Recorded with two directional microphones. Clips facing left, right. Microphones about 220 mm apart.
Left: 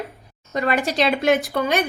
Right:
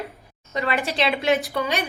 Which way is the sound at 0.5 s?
45° left (ahead or behind).